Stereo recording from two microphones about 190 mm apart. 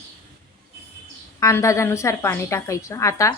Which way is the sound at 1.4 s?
15° left (ahead or behind).